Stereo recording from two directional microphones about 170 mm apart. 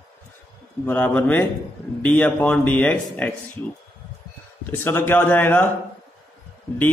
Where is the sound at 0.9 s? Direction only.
10° left (ahead or behind).